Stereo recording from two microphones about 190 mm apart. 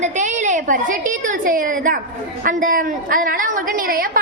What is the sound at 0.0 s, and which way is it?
A woman's voice, 40° right (ahead or behind).